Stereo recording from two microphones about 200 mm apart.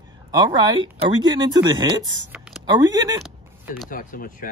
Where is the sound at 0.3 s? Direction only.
20° right (ahead or behind).